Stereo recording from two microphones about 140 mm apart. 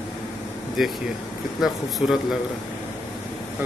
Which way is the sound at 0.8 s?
5° right (ahead or behind).